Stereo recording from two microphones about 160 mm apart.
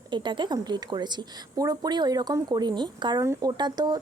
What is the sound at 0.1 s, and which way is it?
A woman's voice, 30° right (ahead or behind).